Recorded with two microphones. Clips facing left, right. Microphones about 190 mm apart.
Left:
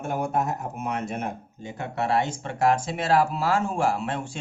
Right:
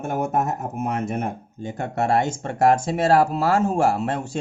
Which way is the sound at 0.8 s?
55° right (ahead or behind).